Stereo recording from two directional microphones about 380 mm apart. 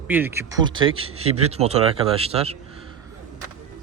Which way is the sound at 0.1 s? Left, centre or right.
Centre.